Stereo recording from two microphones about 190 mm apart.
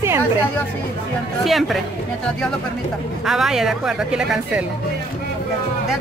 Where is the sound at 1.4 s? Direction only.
Centre (ahead or behind).